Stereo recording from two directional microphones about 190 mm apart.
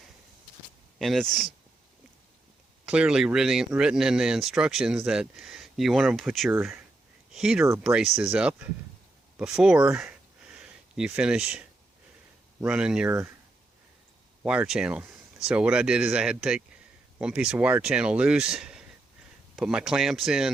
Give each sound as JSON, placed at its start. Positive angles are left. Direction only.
{"t": 0.9, "sound": "speech", "side_deg": 0}
{"t": 2.8, "sound": "speech", "side_deg": -5}
{"t": 9.4, "sound": "a sound", "side_deg": -5}
{"t": 12.5, "sound": "speech", "side_deg": -5}
{"t": 14.4, "sound": "speech", "side_deg": -5}